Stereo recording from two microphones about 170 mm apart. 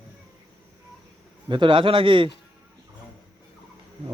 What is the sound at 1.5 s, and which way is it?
Speech, 30° right (ahead or behind).